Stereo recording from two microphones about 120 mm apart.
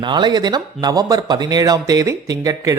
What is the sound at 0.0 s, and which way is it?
A man's voice, 40° right (ahead or behind).